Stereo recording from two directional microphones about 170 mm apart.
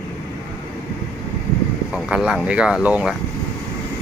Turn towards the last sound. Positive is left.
turn(degrees=-5)  # may be behind; listen again after turning